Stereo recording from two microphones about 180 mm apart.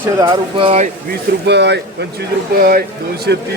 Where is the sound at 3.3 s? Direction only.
70° right (ahead or behind).